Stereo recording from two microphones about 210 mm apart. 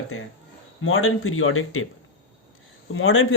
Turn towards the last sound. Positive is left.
turn(degrees=70)  # may be behind; listen again after turning